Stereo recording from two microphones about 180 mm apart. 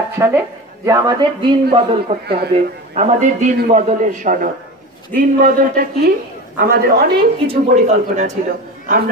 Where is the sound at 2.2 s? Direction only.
65° right (ahead or behind).